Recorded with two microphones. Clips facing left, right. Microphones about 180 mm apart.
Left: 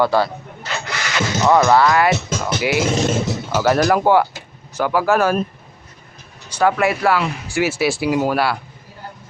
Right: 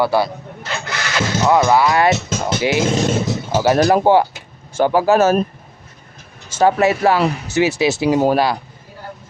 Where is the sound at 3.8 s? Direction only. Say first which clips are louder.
Right 3 dB; 30° right (ahead or behind).